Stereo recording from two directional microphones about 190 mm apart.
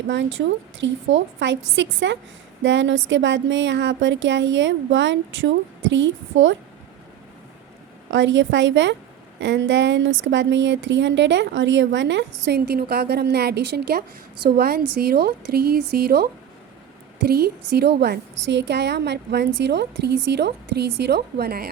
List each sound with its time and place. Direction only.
0.1 s speech: 75° right (ahead or behind)
8.1 s a woman's voice: 75° right (ahead or behind); by 21.7 s 55° right (ahead or behind)